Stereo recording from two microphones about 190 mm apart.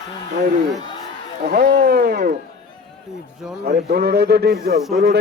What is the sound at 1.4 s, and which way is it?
Speech, 55° right (ahead or behind).